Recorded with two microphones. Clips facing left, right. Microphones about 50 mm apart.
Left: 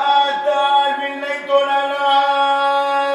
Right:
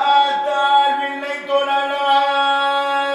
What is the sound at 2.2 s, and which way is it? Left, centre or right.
Music, right.